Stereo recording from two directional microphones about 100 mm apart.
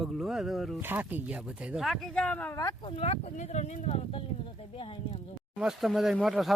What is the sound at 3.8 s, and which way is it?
Speech, 90° left.